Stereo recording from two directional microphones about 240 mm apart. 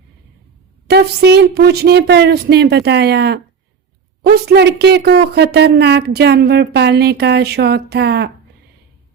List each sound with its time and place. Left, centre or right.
0.9 s a woman's voice: right